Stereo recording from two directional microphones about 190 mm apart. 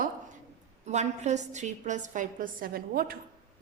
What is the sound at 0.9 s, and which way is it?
A woman's voice, 35° right (ahead or behind).